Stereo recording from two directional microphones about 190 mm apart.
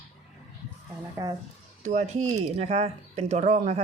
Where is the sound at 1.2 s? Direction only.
15° right (ahead or behind).